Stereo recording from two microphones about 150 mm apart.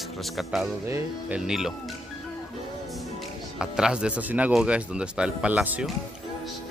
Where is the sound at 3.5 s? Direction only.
5° right (ahead or behind).